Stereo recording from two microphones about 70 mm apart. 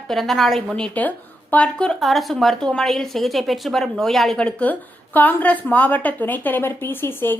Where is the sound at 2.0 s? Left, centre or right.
Centre.